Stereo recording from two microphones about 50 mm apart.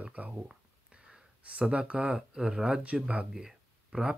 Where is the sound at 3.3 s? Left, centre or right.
Centre.